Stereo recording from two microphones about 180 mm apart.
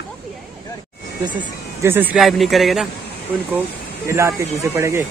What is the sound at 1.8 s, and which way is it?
A man's voice, 10° right (ahead or behind).